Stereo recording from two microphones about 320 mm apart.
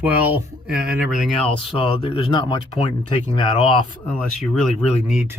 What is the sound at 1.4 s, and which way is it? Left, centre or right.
Speech, centre.